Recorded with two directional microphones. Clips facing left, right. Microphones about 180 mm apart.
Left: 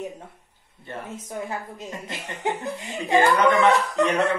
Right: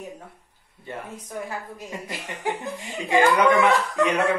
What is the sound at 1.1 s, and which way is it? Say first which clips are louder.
Speech: left 3 dB; 20° left (ahead or behind).